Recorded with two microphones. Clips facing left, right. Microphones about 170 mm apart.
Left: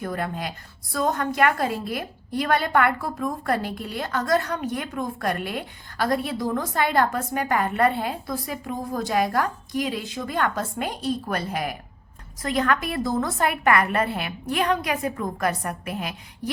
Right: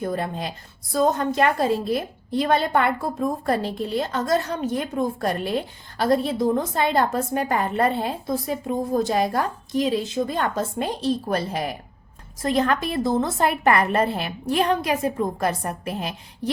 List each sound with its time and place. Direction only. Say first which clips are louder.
0.0 s a woman's voice: right 2 dB; 25° right (ahead or behind)